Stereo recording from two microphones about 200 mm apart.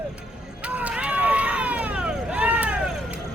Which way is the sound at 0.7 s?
5° right (ahead or behind).